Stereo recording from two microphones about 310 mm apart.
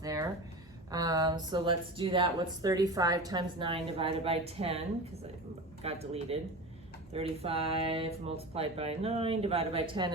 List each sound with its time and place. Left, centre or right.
0.0 s a sound: centre
0.9 s speech: centre
5.8 s speech: centre